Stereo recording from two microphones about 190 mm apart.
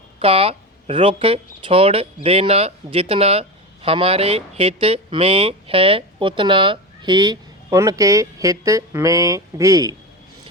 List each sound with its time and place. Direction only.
0.2 s speech: 30° right (ahead or behind)